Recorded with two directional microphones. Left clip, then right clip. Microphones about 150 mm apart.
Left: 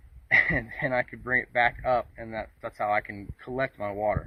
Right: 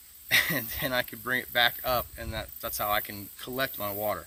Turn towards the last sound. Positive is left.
turn(degrees=-40)  # may be behind; listen again after turning